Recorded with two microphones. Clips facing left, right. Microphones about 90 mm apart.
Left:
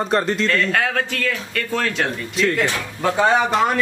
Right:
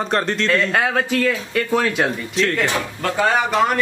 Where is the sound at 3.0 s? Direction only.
15° left (ahead or behind).